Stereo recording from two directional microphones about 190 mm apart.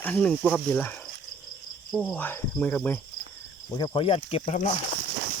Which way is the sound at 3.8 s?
25° left (ahead or behind).